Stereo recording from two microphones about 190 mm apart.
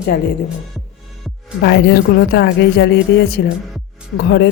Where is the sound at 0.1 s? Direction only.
50° left (ahead or behind).